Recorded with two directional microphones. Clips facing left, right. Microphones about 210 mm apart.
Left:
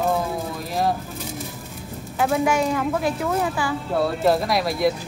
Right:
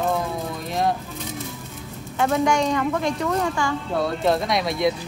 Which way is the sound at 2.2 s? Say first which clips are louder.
Even; 5° left (ahead or behind).